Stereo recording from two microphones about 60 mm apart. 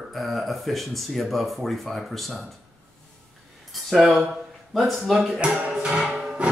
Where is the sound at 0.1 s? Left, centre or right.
Centre.